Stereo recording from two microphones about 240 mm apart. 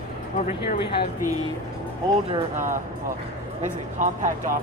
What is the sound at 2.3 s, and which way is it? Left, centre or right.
Speech, right.